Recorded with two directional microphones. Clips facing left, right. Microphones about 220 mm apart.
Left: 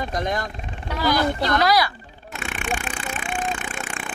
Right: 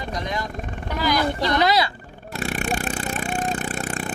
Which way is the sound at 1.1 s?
20° right (ahead or behind).